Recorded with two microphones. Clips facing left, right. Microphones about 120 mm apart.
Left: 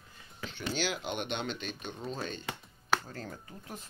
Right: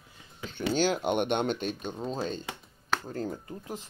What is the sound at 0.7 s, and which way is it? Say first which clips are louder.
Speech: right 9 dB; 45° right (ahead or behind).